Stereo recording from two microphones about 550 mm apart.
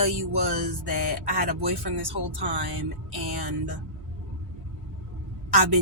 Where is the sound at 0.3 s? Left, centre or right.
Right.